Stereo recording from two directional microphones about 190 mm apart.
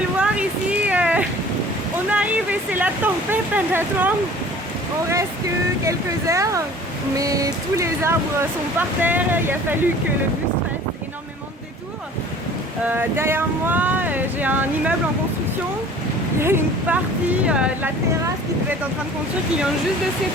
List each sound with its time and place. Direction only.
0.2 s a sound: 5° right (ahead or behind)
2.0 s speech: 10° right (ahead or behind)
5.8 s speech: 15° right (ahead or behind)
12.9 s speech: 10° right (ahead or behind)
16.4 s speech: 10° right (ahead or behind)